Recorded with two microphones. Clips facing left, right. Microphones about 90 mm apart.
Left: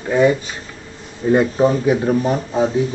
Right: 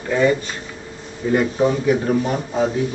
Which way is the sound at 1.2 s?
30° left (ahead or behind).